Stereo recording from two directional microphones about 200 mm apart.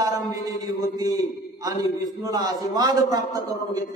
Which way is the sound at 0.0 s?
15° right (ahead or behind).